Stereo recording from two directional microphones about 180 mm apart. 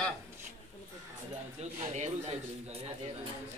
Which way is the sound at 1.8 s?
40° right (ahead or behind).